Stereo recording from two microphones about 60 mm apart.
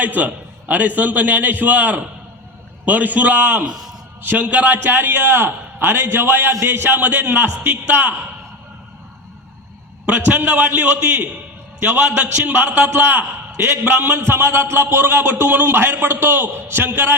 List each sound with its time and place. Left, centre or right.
0.0 s a man's voice: right
3.6 s a man's voice: centre
4.2 s a man's voice: right
10.1 s a man's voice: right